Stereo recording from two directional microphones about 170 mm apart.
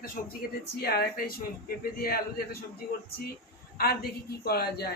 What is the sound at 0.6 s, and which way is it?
A woman's voice, 65° left (ahead or behind).